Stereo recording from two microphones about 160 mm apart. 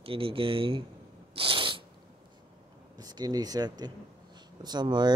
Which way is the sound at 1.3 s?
35° right (ahead or behind).